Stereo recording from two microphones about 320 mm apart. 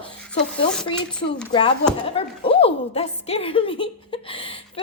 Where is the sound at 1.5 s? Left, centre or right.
Centre.